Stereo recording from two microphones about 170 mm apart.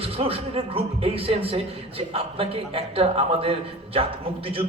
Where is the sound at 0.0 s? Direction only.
35° right (ahead or behind).